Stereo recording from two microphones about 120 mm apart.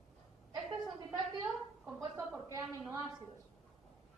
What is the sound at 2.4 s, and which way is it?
Speech, 25° right (ahead or behind).